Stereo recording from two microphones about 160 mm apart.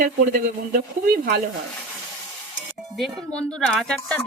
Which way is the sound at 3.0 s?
Centre (ahead or behind).